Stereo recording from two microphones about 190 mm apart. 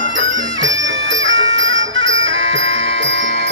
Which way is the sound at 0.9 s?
75° right (ahead or behind).